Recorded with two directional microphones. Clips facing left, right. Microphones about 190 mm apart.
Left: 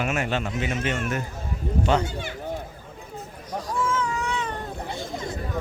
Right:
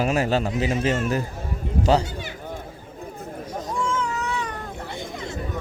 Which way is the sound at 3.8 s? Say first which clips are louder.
Even; 10° left (ahead or behind).